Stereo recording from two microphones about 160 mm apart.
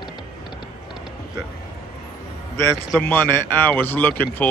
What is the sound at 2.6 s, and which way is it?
A man's voice, 15° left (ahead or behind).